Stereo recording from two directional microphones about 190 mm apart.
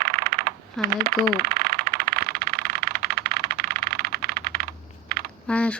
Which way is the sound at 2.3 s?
55° right (ahead or behind).